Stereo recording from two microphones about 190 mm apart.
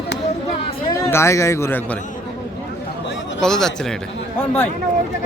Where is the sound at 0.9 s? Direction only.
15° left (ahead or behind).